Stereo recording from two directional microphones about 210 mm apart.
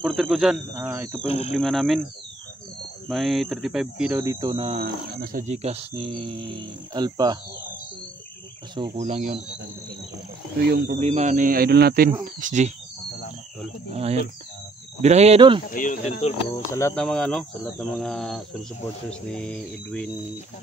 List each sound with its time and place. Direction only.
0.0 s speech: centre (ahead or behind)
1.2 s speech: 30° left (ahead or behind)
1.5 s speech: centre (ahead or behind)
3.1 s speech: centre (ahead or behind)
4.1 s speech: 15° right (ahead or behind)
4.7 s speech: 45° right (ahead or behind); by 7.3 s 20° right (ahead or behind)
8.9 s speech: 35° right (ahead or behind)
10.9 s speech: 35° right (ahead or behind)
12.4 s speech: 35° right (ahead or behind)
13.8 s speech: 30° right (ahead or behind)
15.7 s speech: 35° left (ahead or behind)
16.9 s speech: 5° left (ahead or behind)